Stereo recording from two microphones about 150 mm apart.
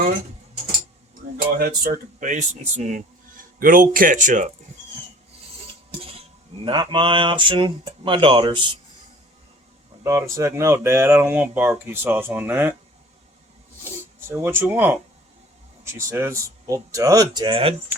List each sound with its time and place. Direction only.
1.5 s speech: 90° right
2.1 s speech: 55° right (ahead or behind)
3.6 s speech: 70° right (ahead or behind)
6.0 s cutlery: 40° right (ahead or behind)
6.7 s speech: 30° right (ahead or behind)
10.0 s speech: 20° right (ahead or behind)
14.2 s speech: 15° right (ahead or behind); by 17.7 s 40° right (ahead or behind)